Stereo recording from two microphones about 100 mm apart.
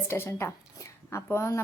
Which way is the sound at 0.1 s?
25° left (ahead or behind).